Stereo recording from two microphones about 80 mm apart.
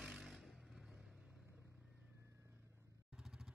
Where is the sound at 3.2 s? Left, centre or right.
Centre.